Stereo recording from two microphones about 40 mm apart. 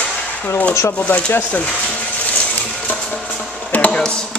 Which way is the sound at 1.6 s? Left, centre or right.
Left.